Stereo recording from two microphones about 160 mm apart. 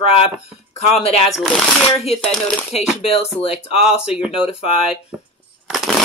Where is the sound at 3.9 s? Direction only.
5° right (ahead or behind).